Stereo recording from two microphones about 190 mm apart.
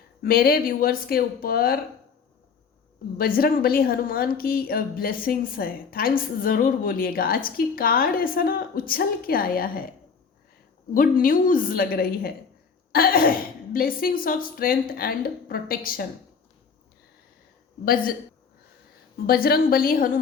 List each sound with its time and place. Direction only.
0.2 s a woman's voice: 50° left (ahead or behind)
3.2 s a woman's voice: 50° left (ahead or behind)
10.9 s a woman's voice: 45° left (ahead or behind)
17.8 s a woman's voice: 50° left (ahead or behind)
19.3 s a woman's voice: 50° left (ahead or behind)